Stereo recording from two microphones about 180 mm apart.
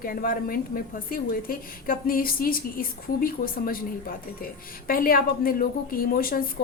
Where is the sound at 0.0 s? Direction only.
50° left (ahead or behind).